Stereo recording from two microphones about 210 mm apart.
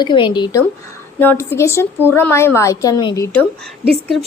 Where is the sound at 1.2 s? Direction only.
10° left (ahead or behind).